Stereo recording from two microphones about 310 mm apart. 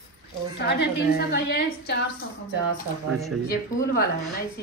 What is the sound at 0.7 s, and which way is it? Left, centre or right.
A woman's voice, left.